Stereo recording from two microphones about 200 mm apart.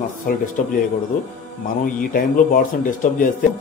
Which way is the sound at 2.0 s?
45° left (ahead or behind).